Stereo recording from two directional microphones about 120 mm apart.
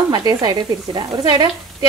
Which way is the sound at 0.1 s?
35° right (ahead or behind).